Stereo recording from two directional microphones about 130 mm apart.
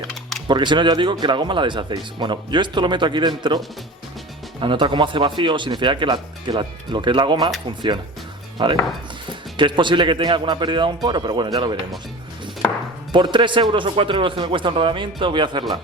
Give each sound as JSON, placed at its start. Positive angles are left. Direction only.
{"t": 0.1, "sound": "typing", "side_deg": 0}
{"t": 0.4, "sound": "speech", "side_deg": -35}
{"t": 4.6, "sound": "speech", "side_deg": -40}
{"t": 8.6, "sound": "speech", "side_deg": -35}
{"t": 13.1, "sound": "speech", "side_deg": -35}